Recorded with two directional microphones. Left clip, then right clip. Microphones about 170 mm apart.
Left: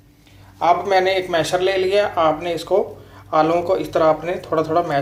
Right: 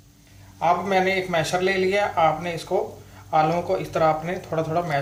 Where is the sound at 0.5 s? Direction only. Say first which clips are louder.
Left 5 dB; 40° left (ahead or behind).